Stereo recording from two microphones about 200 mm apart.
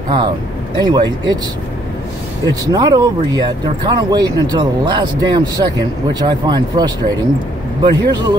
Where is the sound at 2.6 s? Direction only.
20° right (ahead or behind).